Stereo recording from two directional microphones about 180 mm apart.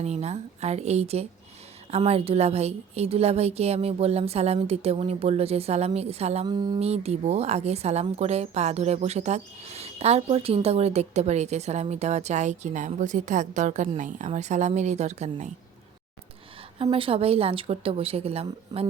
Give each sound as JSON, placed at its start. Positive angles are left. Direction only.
{"t": 0.0, "sound": "speech", "side_deg": -35}
{"t": 6.4, "sound": "speech", "side_deg": -25}
{"t": 16.7, "sound": "speech", "side_deg": -30}